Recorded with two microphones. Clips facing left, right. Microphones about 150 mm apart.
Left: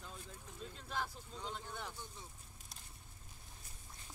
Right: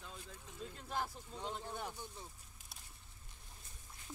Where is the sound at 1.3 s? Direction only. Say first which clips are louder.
Right 3 dB; 10° right (ahead or behind).